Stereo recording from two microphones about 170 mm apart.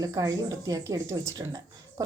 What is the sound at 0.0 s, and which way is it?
Speech, 20° right (ahead or behind).